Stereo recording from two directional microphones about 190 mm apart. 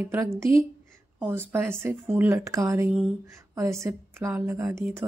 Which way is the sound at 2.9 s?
5° right (ahead or behind).